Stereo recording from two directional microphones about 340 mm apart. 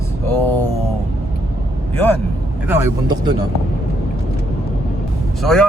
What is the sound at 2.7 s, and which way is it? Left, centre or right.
Speech, centre.